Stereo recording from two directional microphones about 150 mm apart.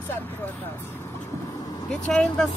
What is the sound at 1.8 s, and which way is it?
Speech, 5° left (ahead or behind).